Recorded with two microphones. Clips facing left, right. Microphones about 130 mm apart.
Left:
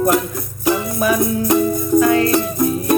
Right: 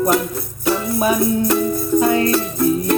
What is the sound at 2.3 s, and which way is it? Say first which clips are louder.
Music: even; 15° left (ahead or behind).